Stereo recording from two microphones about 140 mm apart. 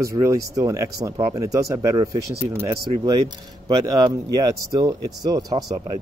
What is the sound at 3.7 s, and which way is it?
Speech, 25° right (ahead or behind).